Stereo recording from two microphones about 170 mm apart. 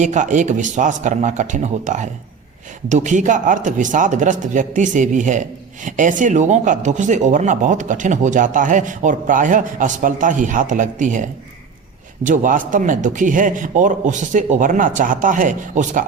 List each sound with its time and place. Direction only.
0.0 s speech: 45° right (ahead or behind)